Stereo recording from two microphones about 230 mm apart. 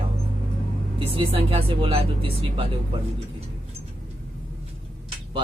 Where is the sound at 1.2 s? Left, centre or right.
Right.